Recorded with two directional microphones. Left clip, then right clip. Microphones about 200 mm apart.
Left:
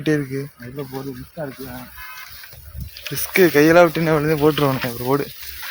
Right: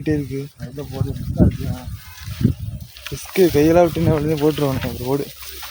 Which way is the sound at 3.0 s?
15° right (ahead or behind).